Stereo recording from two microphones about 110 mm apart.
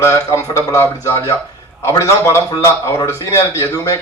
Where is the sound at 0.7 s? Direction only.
25° left (ahead or behind).